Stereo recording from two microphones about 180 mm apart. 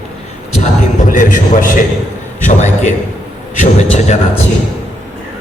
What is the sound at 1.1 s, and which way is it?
A man's voice, 45° left (ahead or behind).